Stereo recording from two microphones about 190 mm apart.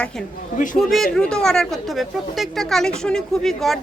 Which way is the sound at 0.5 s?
45° left (ahead or behind).